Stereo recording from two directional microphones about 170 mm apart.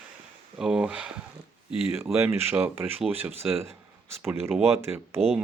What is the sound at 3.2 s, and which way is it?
Speech, 35° right (ahead or behind).